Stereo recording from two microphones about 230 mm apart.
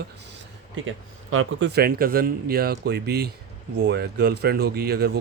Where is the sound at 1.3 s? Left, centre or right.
Right.